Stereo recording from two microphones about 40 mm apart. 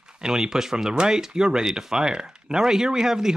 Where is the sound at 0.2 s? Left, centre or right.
Centre.